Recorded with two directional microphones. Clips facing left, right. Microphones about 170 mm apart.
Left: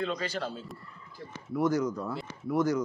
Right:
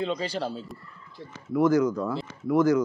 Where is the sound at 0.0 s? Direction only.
30° right (ahead or behind).